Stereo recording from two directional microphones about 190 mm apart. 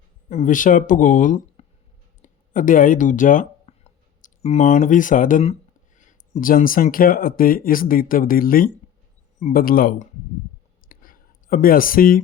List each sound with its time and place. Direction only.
0.3 s speech: 40° left (ahead or behind)
10.8 s clicking: 45° left (ahead or behind)